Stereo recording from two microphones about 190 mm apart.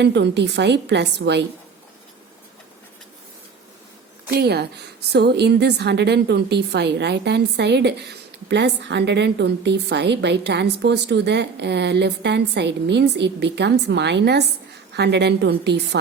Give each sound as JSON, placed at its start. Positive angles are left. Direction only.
{"t": 0.0, "sound": "a woman's voice", "side_deg": -65}
{"t": 4.3, "sound": "a woman's voice", "side_deg": -55}